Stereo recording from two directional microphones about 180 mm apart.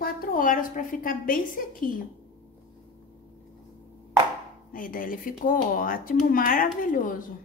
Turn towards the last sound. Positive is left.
turn(degrees=50)  # may be behind; listen again after turning